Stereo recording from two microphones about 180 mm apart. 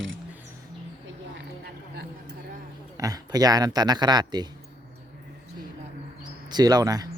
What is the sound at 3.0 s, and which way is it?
Speech, 20° right (ahead or behind).